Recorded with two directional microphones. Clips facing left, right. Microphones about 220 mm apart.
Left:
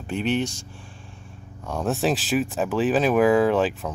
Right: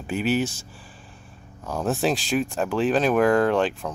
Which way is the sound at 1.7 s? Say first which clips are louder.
Even; centre (ahead or behind).